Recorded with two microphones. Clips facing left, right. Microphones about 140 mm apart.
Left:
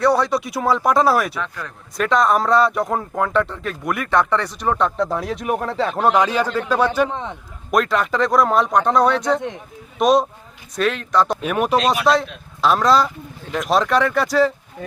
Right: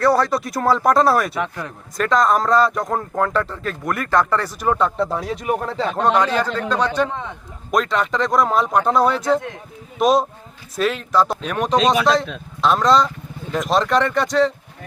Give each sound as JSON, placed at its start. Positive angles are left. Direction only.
{"t": 0.0, "sound": "speech", "side_deg": 0}
{"t": 1.4, "sound": "speech", "side_deg": -20}
{"t": 2.0, "sound": "speech", "side_deg": 0}
{"t": 11.3, "sound": "speech", "side_deg": 10}